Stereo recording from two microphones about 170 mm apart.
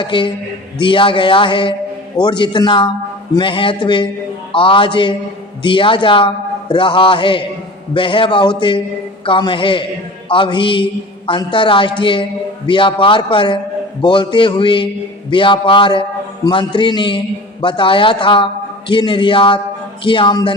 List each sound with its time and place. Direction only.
0.0 s a man's voice: 30° left (ahead or behind)